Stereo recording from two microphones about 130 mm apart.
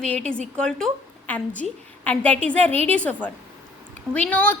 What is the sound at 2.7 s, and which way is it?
Speech, 50° right (ahead or behind).